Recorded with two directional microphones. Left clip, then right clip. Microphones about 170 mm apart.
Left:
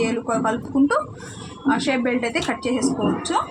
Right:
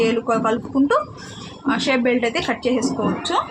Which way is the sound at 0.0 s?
50° right (ahead or behind).